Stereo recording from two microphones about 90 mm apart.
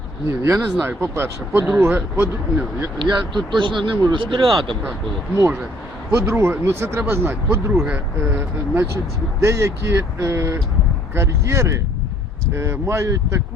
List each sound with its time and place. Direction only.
0.3 s speech: 35° right (ahead or behind)
3.0 s speech: 60° right (ahead or behind)
6.1 s speech: 25° right (ahead or behind)